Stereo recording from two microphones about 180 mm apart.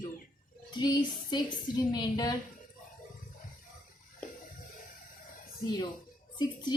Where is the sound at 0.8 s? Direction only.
25° left (ahead or behind).